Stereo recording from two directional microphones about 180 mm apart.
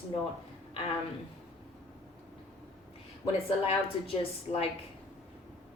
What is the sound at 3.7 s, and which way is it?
A woman's voice, 30° left (ahead or behind).